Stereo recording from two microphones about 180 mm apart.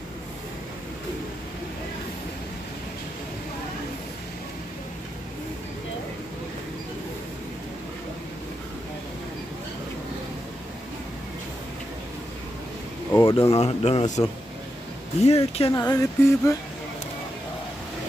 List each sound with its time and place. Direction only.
13.1 s speech: 15° left (ahead or behind)
13.5 s speech: 35° left (ahead or behind)
15.2 s speech: 35° left (ahead or behind)
15.7 s a sound: 20° left (ahead or behind)